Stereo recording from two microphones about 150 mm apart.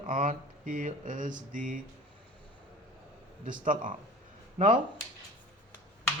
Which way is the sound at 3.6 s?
60° right (ahead or behind).